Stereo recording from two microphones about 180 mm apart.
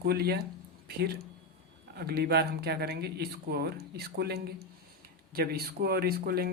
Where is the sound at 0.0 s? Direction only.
60° right (ahead or behind).